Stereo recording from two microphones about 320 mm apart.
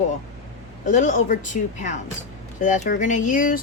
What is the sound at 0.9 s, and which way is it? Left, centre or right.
Speech, left.